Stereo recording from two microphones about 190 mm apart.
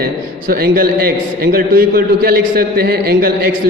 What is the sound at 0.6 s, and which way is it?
A man's voice, 50° right (ahead or behind).